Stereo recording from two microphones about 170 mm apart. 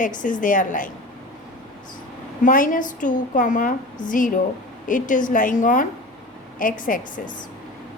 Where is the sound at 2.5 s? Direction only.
55° left (ahead or behind).